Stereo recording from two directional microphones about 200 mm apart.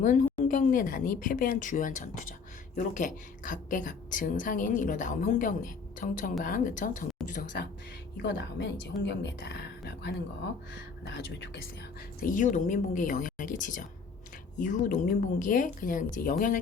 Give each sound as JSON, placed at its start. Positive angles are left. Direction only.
{"t": 0.0, "sound": "a woman's voice", "side_deg": 40}
{"t": 12.2, "sound": "a woman's voice", "side_deg": 40}